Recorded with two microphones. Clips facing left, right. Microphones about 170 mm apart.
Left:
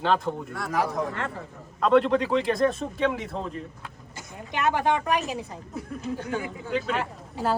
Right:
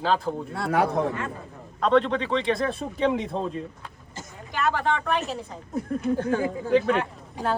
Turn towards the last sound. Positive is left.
turn(degrees=5)  # may be behind; listen again after turning